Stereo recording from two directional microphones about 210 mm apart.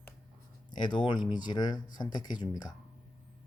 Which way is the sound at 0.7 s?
20° left (ahead or behind).